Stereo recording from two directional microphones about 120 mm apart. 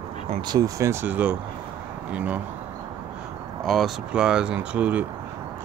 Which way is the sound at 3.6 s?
Centre (ahead or behind).